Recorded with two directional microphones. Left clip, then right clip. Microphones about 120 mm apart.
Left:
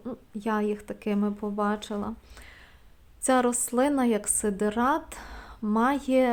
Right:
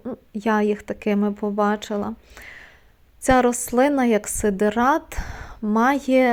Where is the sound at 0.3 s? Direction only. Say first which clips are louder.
Right 8 dB; 40° right (ahead or behind).